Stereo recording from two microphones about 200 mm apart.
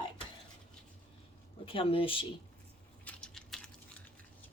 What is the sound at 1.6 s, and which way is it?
Speech, 30° left (ahead or behind).